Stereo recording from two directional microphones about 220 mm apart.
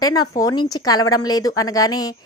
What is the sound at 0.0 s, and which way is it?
A woman's voice, 15° left (ahead or behind).